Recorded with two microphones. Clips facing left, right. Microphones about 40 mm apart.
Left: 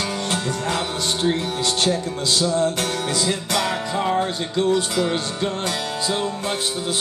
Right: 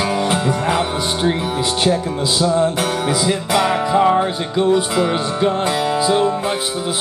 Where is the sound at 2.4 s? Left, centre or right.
Centre.